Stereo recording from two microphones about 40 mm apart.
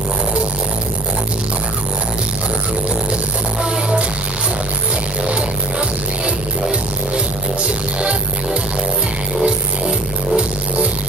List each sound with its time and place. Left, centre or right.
9.4 s music: right